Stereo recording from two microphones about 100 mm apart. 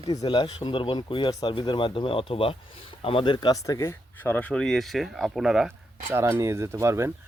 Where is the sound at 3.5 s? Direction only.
35° left (ahead or behind).